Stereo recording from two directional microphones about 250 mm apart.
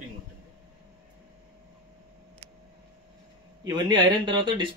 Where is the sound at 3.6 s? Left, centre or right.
Centre.